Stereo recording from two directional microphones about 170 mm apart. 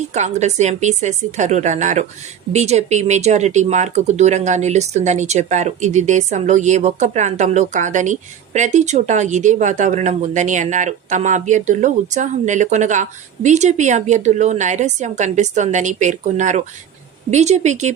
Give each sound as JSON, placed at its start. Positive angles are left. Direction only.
{"t": 0.1, "sound": "speech", "side_deg": -40}